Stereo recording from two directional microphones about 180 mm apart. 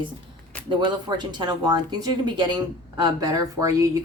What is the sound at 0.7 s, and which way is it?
Speech, 25° right (ahead or behind).